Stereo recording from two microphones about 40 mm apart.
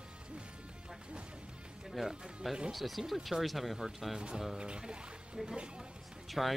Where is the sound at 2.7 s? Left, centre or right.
Centre.